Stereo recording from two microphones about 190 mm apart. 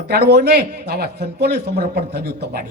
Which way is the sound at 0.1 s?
55° right (ahead or behind).